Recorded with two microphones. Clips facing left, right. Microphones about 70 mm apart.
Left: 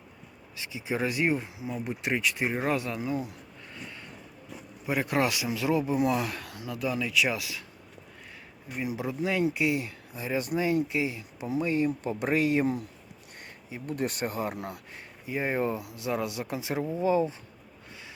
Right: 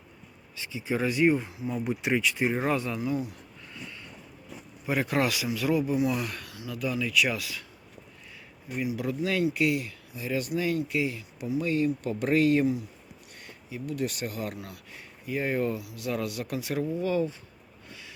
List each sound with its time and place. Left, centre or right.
0.8 s speech: centre
3.0 s speech: left
4.9 s speech: centre
5.5 s speech: left
6.0 s speech: left
6.4 s speech: left
6.8 s speech: left
9.0 s speech: centre
13.7 s speech: left